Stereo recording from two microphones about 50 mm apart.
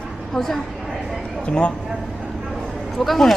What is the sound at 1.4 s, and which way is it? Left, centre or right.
Speech, left.